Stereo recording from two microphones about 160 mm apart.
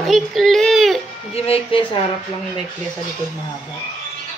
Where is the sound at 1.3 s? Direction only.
40° left (ahead or behind).